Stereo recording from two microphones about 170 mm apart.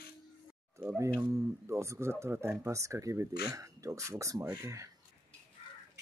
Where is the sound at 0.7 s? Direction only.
15° right (ahead or behind).